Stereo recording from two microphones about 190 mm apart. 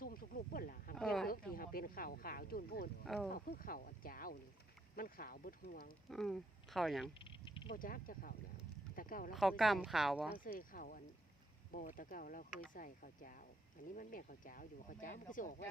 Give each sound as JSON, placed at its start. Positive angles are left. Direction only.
{"t": 0.0, "sound": "speech", "side_deg": 50}
{"t": 0.9, "sound": "speech", "side_deg": 5}
{"t": 1.3, "sound": "speech", "side_deg": 50}
{"t": 3.0, "sound": "speech", "side_deg": 0}
{"t": 3.3, "sound": "speech", "side_deg": 50}
{"t": 6.1, "sound": "speech", "side_deg": 0}
{"t": 7.3, "sound": "a sound", "side_deg": 25}
{"t": 7.7, "sound": "speech", "side_deg": 50}
{"t": 9.3, "sound": "speech", "side_deg": 0}
{"t": 10.3, "sound": "speech", "side_deg": 45}